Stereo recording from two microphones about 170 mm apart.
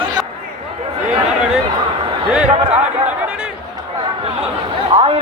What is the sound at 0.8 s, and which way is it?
Speech, 35° right (ahead or behind).